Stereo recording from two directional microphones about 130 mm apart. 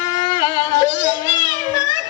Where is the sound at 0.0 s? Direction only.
25° left (ahead or behind).